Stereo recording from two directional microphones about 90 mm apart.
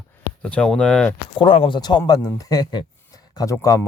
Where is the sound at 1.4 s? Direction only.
75° left (ahead or behind); by 2.0 s 60° left (ahead or behind).